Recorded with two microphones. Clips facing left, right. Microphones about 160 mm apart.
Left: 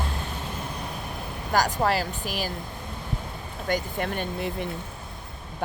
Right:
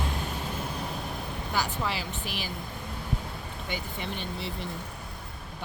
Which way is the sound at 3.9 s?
55° left (ahead or behind).